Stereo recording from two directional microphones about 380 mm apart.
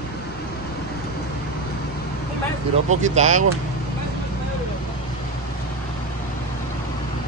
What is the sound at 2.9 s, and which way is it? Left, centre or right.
Speech, centre.